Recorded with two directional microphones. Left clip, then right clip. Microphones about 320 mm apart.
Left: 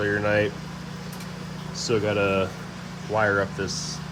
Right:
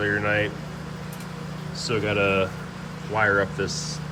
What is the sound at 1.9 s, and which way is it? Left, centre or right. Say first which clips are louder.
Speech: even; centre.